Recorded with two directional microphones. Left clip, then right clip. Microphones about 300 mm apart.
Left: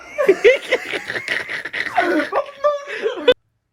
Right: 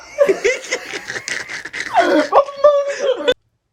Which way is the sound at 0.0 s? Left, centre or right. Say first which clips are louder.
Left 1 dB; centre.